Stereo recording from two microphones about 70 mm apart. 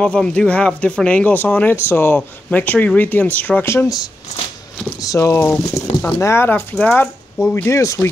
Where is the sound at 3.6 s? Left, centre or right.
Left.